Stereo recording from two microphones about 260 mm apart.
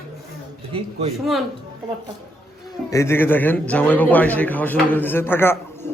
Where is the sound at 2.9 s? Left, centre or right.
Centre.